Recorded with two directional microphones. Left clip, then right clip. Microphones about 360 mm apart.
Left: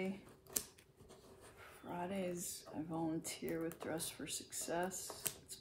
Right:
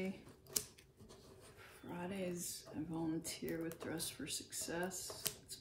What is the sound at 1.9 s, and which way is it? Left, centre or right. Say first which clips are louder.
Speech: left 2 dB; centre.